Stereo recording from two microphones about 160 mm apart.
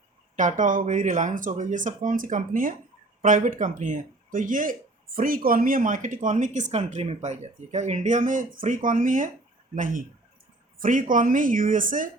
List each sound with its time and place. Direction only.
0.3 s speech: 50° right (ahead or behind)